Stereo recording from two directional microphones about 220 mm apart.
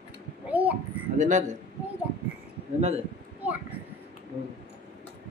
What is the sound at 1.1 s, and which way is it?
Speech, 35° right (ahead or behind).